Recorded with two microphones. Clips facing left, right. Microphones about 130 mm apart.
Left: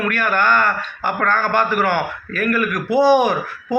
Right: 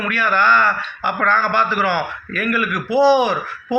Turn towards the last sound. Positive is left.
turn(degrees=50)  # may be behind; listen again after turning